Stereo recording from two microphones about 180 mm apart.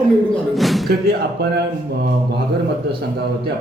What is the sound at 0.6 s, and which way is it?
Speech, centre (ahead or behind).